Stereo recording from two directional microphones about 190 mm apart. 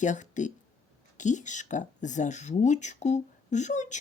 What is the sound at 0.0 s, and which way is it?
Speech, 40° left (ahead or behind).